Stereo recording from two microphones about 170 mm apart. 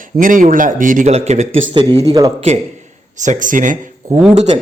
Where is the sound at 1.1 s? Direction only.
40° right (ahead or behind).